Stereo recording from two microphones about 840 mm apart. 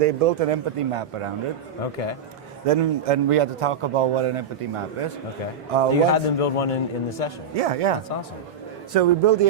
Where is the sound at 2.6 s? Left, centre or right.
Right.